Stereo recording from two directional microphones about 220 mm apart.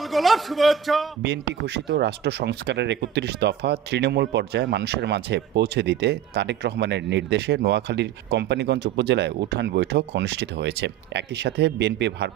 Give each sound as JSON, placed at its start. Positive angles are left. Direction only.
{"t": 0.0, "sound": "a man's voice", "side_deg": 0}
{"t": 1.2, "sound": "speech", "side_deg": -50}